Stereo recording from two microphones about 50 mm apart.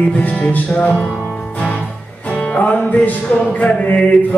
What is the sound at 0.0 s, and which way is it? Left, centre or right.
Music, left.